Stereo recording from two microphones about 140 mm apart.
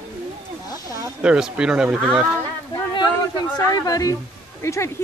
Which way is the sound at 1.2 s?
5° right (ahead or behind).